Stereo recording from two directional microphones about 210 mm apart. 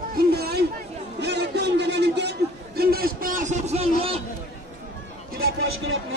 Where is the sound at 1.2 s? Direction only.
55° right (ahead or behind); by 3.9 s 30° right (ahead or behind).